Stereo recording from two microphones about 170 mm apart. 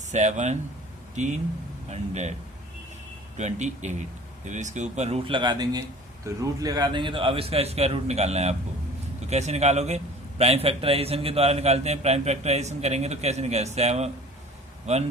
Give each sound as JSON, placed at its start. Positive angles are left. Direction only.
{"t": 0.1, "sound": "speech", "side_deg": -45}
{"t": 3.3, "sound": "a man's voice", "side_deg": -45}